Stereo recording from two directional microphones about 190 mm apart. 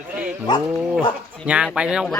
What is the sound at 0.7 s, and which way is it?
Speech, 5° right (ahead or behind).